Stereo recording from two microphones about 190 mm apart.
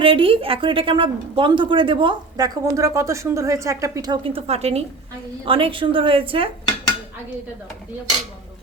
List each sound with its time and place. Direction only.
0.0 s a woman's voice: 30° right (ahead or behind)